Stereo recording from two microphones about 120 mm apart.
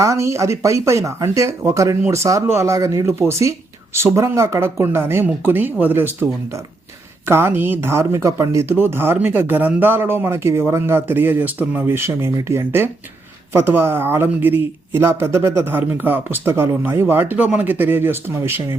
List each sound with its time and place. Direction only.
0.0 s speech: 25° right (ahead or behind)